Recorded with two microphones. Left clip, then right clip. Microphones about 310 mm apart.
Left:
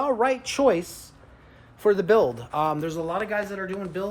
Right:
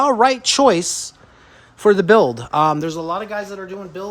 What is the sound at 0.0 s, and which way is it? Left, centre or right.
A woman's voice, right.